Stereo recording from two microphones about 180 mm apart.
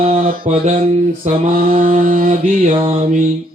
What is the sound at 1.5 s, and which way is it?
Mantra, 55° right (ahead or behind).